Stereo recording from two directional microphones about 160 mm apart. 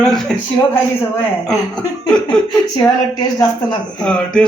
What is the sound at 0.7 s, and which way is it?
A man's voice, 15° left (ahead or behind).